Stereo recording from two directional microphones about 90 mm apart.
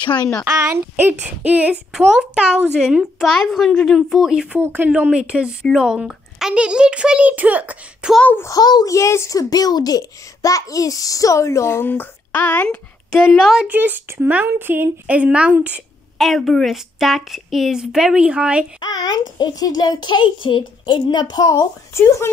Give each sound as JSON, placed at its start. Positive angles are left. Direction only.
{"t": 0.7, "sound": "a woman's voice", "side_deg": -25}
{"t": 4.2, "sound": "a child's voice", "side_deg": -5}
{"t": 4.6, "sound": "a child's voice", "side_deg": -15}
{"t": 8.5, "sound": "a child's voice", "side_deg": 45}
{"t": 8.9, "sound": "a child's voice", "side_deg": 35}
{"t": 12.6, "sound": "speech", "side_deg": 5}
{"t": 13.7, "sound": "a woman's voice", "side_deg": -20}
{"t": 16.2, "sound": "a woman's voice", "side_deg": 0}
{"t": 18.8, "sound": "a child's voice", "side_deg": 45}